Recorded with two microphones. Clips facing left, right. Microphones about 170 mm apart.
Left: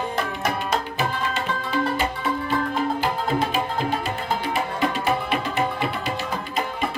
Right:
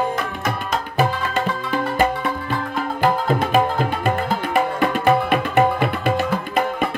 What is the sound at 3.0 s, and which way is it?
Tabla, 55° right (ahead or behind).